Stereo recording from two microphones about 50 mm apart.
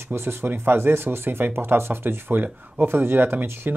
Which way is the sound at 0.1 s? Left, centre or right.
Right.